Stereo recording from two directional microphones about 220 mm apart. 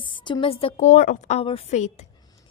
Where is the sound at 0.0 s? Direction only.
20° left (ahead or behind).